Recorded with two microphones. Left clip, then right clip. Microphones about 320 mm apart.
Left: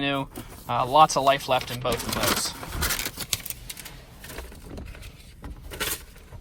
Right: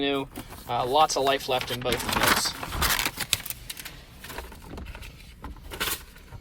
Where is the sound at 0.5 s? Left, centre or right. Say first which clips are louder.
Left 3 dB; centre.